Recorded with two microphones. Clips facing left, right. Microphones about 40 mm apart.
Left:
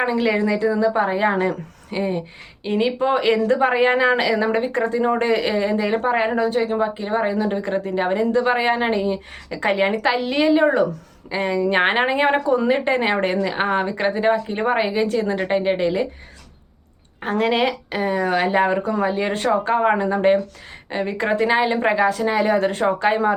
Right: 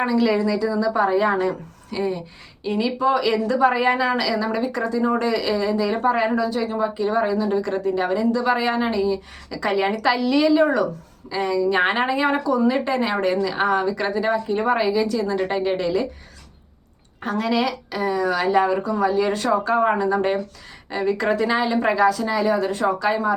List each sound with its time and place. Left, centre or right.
0.0 s a woman's voice: left
17.2 s a woman's voice: left